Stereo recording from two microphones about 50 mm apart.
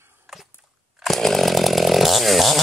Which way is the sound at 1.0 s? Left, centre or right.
Centre.